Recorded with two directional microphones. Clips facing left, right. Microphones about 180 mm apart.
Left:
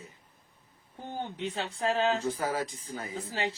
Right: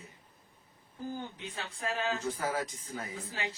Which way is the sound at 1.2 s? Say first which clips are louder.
Left 7 dB; 35° left (ahead or behind).